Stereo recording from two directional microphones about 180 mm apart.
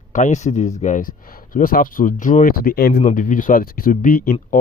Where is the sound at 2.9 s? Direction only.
40° left (ahead or behind).